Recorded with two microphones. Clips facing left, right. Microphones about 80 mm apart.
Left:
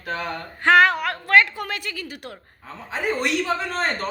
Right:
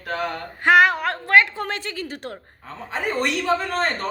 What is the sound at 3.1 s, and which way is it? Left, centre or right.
Speech, centre.